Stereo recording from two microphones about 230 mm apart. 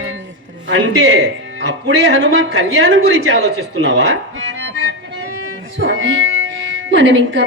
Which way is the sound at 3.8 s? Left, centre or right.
Right.